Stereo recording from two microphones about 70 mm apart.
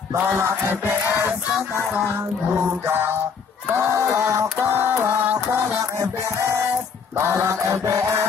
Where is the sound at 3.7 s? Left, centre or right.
Right.